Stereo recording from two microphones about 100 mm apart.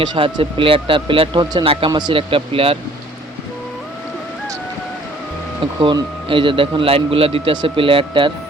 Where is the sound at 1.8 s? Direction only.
50° right (ahead or behind); by 2.8 s 70° right (ahead or behind).